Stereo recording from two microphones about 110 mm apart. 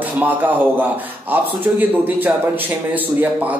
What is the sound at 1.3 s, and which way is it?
A man's voice, 15° right (ahead or behind).